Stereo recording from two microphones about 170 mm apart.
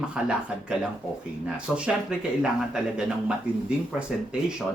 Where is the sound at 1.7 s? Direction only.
5° right (ahead or behind).